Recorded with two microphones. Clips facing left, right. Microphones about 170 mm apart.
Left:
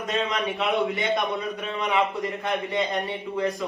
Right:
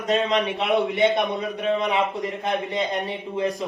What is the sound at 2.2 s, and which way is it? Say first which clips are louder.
Speech: right 2 dB; 20° right (ahead or behind).